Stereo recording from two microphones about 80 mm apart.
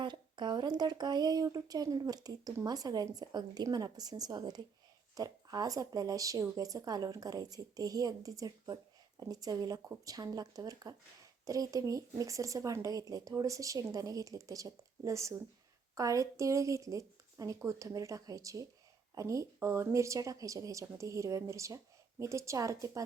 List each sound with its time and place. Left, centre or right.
0.0 s a woman's voice: right